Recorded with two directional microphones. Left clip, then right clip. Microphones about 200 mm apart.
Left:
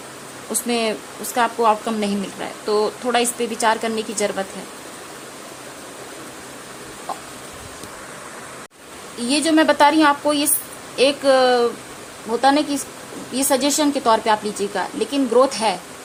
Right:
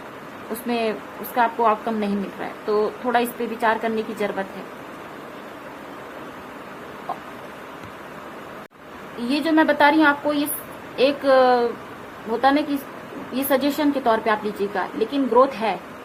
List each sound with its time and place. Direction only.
0.7 s a woman's voice: 30° left (ahead or behind)
9.3 s speech: 30° left (ahead or behind)